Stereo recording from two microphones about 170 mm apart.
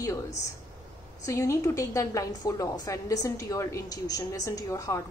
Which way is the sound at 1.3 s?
15° left (ahead or behind).